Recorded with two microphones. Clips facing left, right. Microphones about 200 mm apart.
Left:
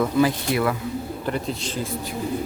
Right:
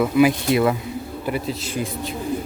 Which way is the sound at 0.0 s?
15° right (ahead or behind).